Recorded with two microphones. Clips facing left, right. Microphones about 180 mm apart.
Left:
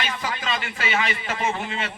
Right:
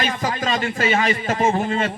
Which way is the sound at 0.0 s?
45° right (ahead or behind).